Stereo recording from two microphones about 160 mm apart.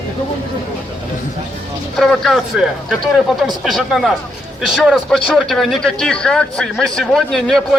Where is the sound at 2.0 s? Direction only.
Centre (ahead or behind).